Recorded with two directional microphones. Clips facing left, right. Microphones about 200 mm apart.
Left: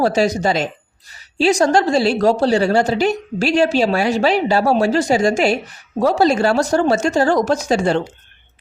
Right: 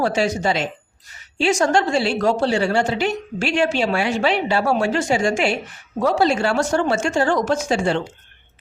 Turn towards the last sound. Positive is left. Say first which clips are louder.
# left 3 dB
turn(degrees=40)  # may be behind; listen again after turning